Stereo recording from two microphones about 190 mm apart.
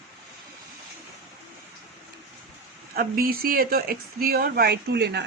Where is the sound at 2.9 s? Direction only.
50° right (ahead or behind).